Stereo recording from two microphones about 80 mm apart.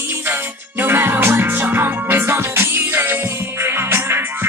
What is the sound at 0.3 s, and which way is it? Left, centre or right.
Music, right.